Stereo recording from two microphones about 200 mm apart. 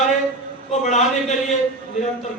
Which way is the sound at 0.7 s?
35° left (ahead or behind).